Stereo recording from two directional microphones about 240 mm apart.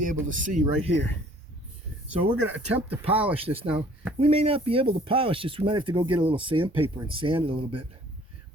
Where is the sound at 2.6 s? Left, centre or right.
Right.